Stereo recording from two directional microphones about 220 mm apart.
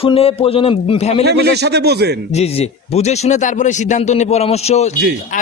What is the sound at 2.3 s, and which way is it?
Speech, 30° left (ahead or behind).